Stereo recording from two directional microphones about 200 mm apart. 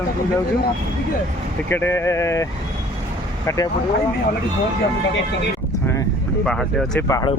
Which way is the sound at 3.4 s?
15° left (ahead or behind).